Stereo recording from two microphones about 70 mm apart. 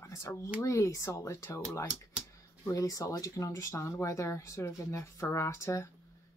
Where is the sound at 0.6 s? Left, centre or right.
Left.